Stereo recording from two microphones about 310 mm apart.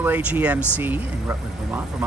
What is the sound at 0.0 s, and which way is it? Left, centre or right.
Speech, centre.